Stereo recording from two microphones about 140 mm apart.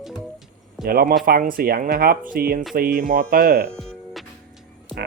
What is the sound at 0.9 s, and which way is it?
Speech, 90° right.